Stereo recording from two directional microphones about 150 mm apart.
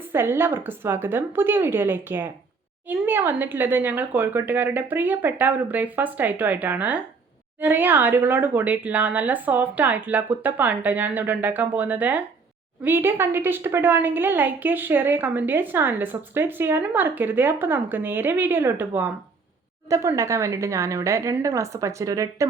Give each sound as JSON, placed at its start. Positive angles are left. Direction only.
{"t": 0.0, "sound": "a woman's voice", "side_deg": -15}